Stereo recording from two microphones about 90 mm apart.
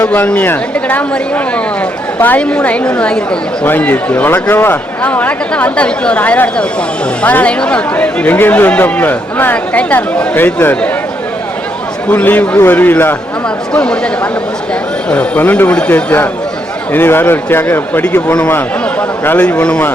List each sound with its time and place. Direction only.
0.0 s a man's voice: 15° left (ahead or behind)
12.0 s speech: 20° left (ahead or behind)
13.7 s a man's voice: 10° left (ahead or behind)